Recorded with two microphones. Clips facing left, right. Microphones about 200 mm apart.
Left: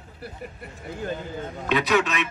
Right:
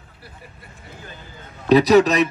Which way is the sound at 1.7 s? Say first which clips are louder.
Right 10 dB; 35° right (ahead or behind).